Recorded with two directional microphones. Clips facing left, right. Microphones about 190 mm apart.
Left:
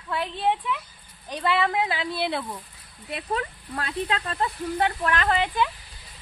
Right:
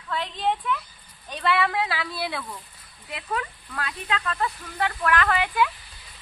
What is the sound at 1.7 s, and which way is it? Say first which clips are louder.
Speech: left 2 dB; 20° left (ahead or behind).